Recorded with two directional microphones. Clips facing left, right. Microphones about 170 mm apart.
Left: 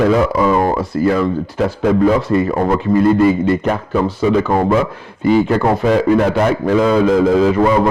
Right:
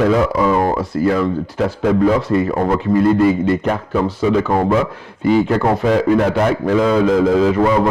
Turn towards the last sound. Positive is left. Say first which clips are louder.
# left 1 dB
turn(degrees=15)  # may be behind; listen again after turning